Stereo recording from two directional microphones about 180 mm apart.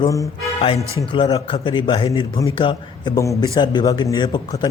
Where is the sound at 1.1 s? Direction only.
25° left (ahead or behind).